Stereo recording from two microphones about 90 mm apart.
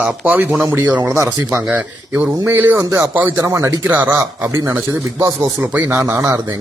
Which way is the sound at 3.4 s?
45° right (ahead or behind).